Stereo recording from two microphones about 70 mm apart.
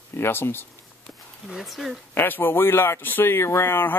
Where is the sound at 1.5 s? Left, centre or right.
Centre.